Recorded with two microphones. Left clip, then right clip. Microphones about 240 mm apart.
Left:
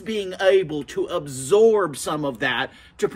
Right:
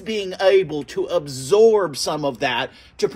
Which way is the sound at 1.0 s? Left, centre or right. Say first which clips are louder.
Right 1 dB; centre.